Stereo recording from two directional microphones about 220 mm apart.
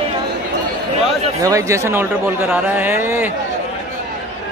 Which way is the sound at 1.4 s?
15° right (ahead or behind).